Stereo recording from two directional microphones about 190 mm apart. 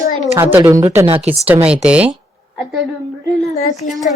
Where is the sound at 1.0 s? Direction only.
30° right (ahead or behind).